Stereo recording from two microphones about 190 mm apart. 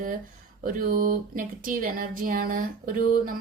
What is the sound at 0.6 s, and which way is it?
Speech, 45° right (ahead or behind).